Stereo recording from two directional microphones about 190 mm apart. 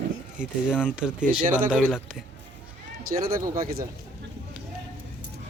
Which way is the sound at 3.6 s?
50° right (ahead or behind).